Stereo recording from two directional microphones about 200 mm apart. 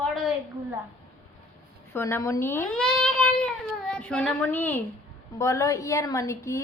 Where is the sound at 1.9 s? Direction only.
10° left (ahead or behind).